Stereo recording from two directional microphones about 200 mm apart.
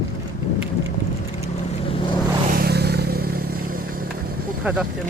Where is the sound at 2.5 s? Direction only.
50° right (ahead or behind).